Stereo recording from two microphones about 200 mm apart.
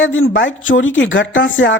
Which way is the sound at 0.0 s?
75° left (ahead or behind).